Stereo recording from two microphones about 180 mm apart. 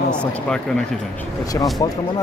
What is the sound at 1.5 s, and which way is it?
Speech, 20° left (ahead or behind).